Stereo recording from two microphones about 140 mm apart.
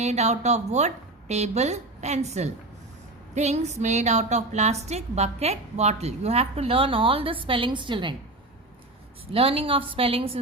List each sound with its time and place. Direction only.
0.0 s a woman's voice: 50° right (ahead or behind); by 8.1 s 35° right (ahead or behind)
9.2 s a woman's voice: 45° right (ahead or behind)